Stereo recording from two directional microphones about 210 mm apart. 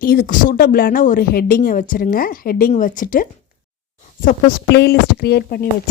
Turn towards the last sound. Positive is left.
turn(degrees=50)  # may be behind; listen again after turning